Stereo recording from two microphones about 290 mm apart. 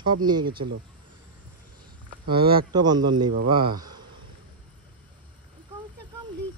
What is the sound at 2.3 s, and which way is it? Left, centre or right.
Speech, centre.